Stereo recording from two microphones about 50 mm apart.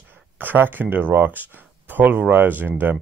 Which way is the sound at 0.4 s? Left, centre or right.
Right.